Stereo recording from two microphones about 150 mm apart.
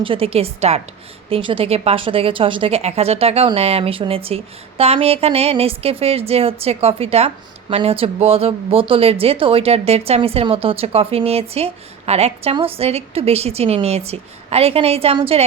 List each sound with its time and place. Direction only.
0.0 s speech: 35° right (ahead or behind)